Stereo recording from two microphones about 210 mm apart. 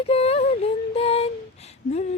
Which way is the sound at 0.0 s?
30° left (ahead or behind).